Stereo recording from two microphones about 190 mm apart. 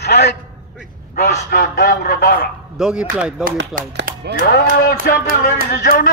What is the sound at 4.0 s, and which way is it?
Speech, 60° right (ahead or behind).